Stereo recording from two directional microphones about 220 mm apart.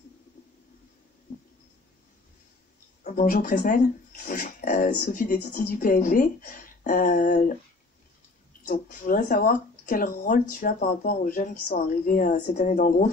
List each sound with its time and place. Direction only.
3.0 s speech: 40° left (ahead or behind)
8.6 s speech: 35° left (ahead or behind)